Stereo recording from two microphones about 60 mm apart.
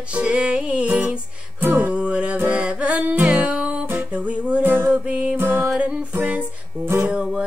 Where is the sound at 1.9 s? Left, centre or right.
Centre.